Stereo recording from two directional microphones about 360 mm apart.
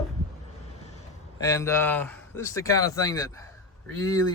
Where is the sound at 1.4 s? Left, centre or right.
Centre.